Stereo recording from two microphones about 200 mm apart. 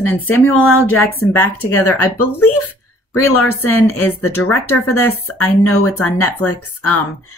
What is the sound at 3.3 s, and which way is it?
Speech, 90° left.